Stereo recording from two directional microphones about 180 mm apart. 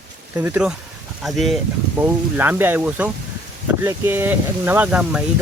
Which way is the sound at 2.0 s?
10° right (ahead or behind).